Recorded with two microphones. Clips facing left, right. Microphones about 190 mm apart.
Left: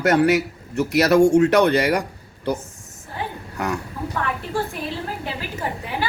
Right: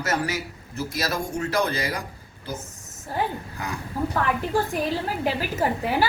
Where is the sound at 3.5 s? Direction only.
70° left (ahead or behind).